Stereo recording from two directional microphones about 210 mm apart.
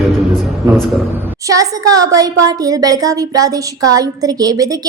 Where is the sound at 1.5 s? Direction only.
15° right (ahead or behind).